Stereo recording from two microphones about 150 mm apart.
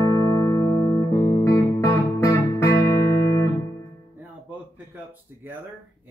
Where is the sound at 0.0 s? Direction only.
15° left (ahead or behind).